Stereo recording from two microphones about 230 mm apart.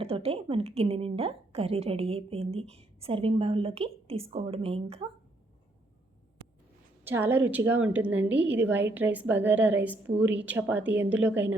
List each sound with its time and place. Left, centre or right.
0.0 s a woman's voice: right
7.0 s a woman's voice: centre